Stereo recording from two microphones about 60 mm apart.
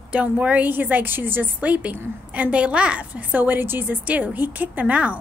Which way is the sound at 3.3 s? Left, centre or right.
Right.